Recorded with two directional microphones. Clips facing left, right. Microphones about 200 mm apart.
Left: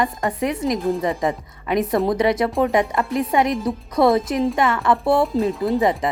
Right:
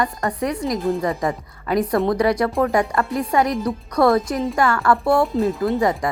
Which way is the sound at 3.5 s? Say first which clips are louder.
Even; centre (ahead or behind).